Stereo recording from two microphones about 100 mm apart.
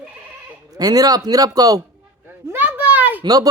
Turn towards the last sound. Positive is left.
turn(degrees=-40)  # may be behind; listen again after turning